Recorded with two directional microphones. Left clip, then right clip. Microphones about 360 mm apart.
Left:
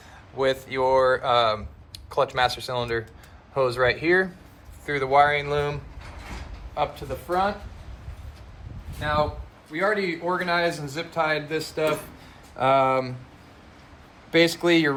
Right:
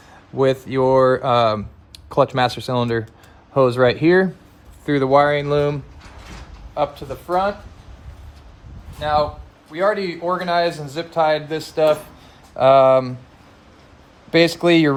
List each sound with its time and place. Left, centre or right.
0.7 s speech: right
9.0 s speech: right
14.3 s speech: right